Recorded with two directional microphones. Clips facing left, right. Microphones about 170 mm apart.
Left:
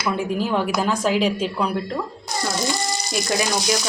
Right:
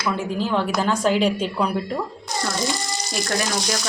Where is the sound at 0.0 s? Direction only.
10° left (ahead or behind).